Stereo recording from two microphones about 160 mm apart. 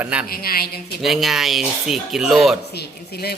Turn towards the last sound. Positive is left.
turn(degrees=80)